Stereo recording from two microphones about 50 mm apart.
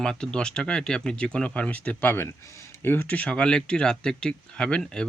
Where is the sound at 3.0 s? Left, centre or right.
Left.